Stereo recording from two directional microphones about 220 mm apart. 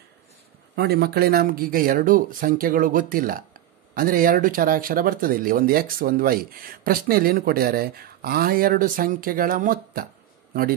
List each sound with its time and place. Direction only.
0.7 s speech: 45° right (ahead or behind)